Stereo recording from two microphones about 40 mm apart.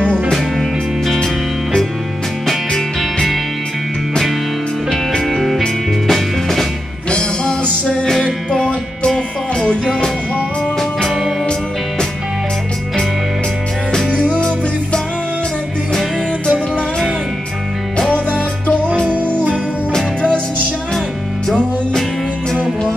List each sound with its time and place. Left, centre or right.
0.3 s music: centre
5.2 s music: centre
7.1 s music: left
11.1 s music: centre
16.4 s music: left
18.1 s music: left